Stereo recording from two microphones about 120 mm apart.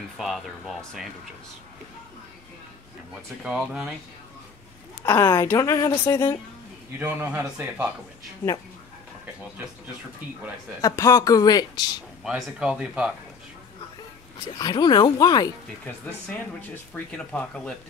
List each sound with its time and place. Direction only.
0.2 s speech: centre (ahead or behind)
3.4 s a man's voice: 10° right (ahead or behind)
5.0 s a woman's voice: 25° left (ahead or behind)
7.0 s a man's voice: 20° right (ahead or behind)
10.8 s speech: 25° left (ahead or behind)
12.2 s a man's voice: 5° right (ahead or behind)
14.6 s speech: 35° left (ahead or behind)
16.9 s speech: 10° left (ahead or behind)